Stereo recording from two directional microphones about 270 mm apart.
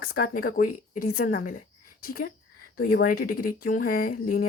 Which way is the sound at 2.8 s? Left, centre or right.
Left.